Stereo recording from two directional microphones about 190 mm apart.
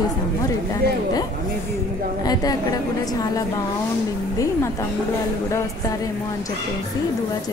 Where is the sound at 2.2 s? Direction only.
20° left (ahead or behind).